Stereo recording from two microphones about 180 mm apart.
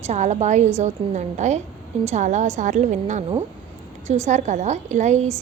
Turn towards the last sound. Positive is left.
turn(degrees=-40)  # may be behind; listen again after turning